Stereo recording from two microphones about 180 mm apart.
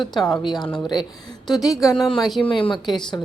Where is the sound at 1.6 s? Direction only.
20° left (ahead or behind).